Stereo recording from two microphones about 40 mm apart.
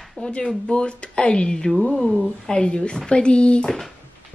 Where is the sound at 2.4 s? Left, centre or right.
Left.